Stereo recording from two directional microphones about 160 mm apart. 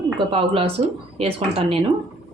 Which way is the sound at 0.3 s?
35° right (ahead or behind).